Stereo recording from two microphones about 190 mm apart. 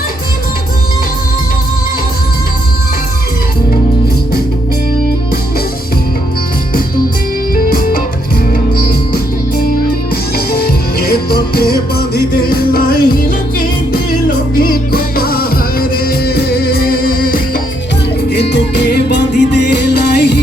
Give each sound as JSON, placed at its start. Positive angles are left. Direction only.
{"t": 7.5, "sound": "music", "side_deg": 50}
{"t": 9.1, "sound": "music", "side_deg": 50}
{"t": 18.3, "sound": "music", "side_deg": 65}